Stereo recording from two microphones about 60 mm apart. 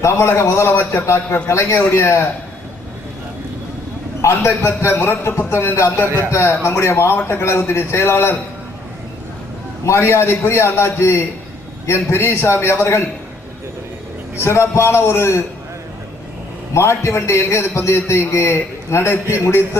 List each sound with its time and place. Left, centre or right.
0.0 s a man's voice: left
4.2 s a man's voice: left
9.8 s a man's voice: left
14.4 s a man's voice: left
16.7 s a man's voice: left